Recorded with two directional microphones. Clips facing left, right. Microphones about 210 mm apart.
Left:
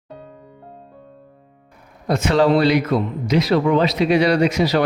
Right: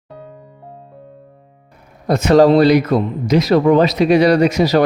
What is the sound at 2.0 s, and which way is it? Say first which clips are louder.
Speech: right 6 dB; 40° right (ahead or behind).